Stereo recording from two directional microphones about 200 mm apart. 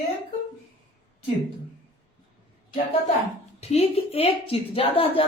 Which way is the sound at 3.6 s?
30° left (ahead or behind).